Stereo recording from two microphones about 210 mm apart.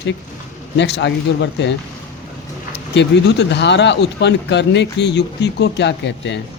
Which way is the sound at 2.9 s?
55° left (ahead or behind).